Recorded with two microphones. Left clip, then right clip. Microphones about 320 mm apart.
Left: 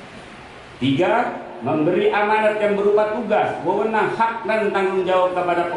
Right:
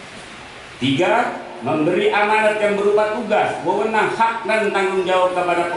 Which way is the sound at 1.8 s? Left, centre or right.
Centre.